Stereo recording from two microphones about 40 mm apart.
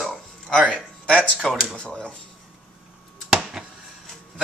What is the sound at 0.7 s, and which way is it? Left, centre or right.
Speech, left.